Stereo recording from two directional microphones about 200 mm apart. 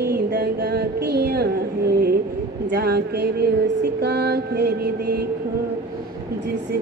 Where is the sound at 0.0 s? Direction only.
50° right (ahead or behind).